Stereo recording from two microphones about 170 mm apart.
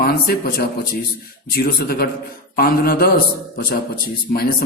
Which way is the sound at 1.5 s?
65° left (ahead or behind).